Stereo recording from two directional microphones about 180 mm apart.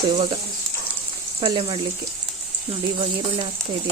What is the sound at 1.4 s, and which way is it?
Speech, 25° right (ahead or behind).